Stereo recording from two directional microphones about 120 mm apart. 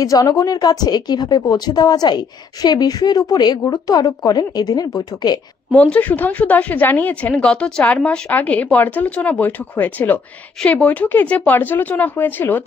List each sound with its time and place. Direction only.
0.0 s a woman's voice: 30° left (ahead or behind)
5.7 s a woman's voice: 10° left (ahead or behind)